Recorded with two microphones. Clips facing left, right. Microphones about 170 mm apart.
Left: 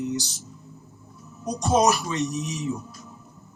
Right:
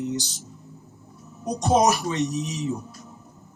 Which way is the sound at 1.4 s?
20° right (ahead or behind).